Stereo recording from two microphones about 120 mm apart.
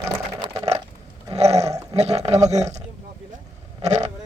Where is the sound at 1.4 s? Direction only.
60° right (ahead or behind).